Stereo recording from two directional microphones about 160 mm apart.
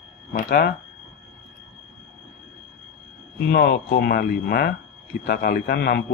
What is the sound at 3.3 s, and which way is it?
Speech, 90° left.